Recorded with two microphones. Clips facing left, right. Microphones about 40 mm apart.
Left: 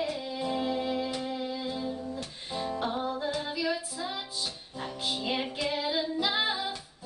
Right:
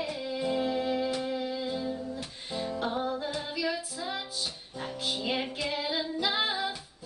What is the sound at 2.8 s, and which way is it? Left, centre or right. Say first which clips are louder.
Music: right 1 dB; centre.